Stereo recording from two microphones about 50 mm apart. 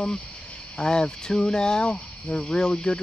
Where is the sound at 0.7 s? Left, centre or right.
Centre.